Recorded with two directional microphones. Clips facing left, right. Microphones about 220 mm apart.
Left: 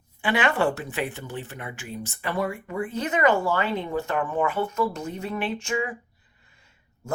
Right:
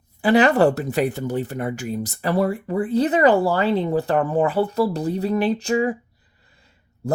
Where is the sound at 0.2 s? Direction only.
40° right (ahead or behind).